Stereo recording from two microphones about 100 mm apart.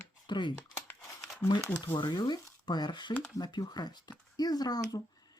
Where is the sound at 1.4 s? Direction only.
25° left (ahead or behind).